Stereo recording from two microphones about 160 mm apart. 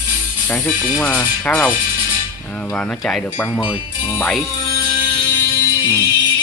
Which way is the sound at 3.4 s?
25° left (ahead or behind).